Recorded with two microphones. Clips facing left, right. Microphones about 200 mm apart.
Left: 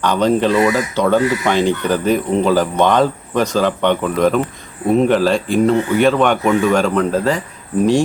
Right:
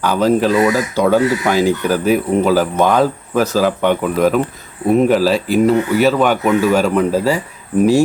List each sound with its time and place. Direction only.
0.0 s speech: 5° right (ahead or behind)